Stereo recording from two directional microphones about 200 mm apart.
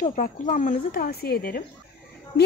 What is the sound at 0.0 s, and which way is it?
Speech, 40° left (ahead or behind).